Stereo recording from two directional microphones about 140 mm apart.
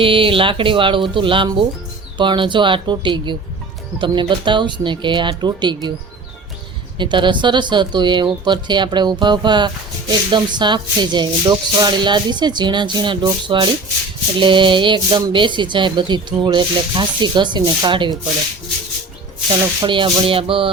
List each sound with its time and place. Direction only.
0.0 s speech: 40° right (ahead or behind)
7.0 s speech: 35° right (ahead or behind)
19.8 s speech: 35° right (ahead or behind)